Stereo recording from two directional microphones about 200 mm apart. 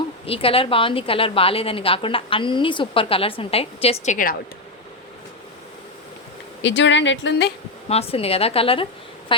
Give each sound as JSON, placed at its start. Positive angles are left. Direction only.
{"t": 0.3, "sound": "a woman's voice", "side_deg": 30}
{"t": 6.6, "sound": "speech", "side_deg": 65}
{"t": 7.9, "sound": "a woman's voice", "side_deg": 30}